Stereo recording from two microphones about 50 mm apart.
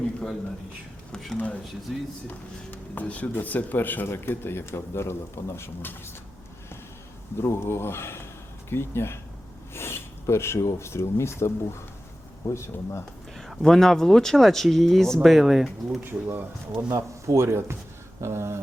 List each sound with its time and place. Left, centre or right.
1.9 s speech: centre
2.2 s a man's voice: left
5.5 s speech: left
7.4 s a man's voice: left
13.3 s speech: centre
16.2 s speech: right
16.9 s speech: right